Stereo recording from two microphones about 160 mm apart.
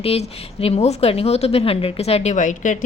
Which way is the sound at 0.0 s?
40° left (ahead or behind).